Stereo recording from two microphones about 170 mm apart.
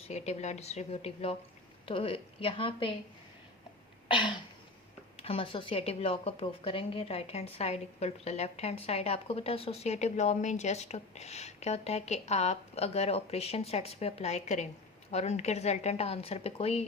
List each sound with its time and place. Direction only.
0.1 s a woman's voice: 40° left (ahead or behind)
4.1 s throat clearing: 30° left (ahead or behind)
5.1 s a woman's voice: 35° left (ahead or behind)